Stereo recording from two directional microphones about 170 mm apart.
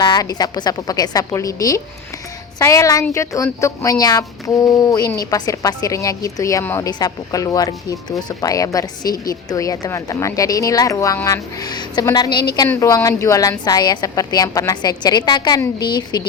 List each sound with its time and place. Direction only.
0.0 s a woman's voice: 25° left (ahead or behind)
12.6 s a woman's voice: 10° left (ahead or behind)